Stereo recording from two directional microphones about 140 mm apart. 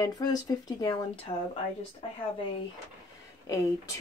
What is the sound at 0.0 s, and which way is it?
Speech, 30° left (ahead or behind).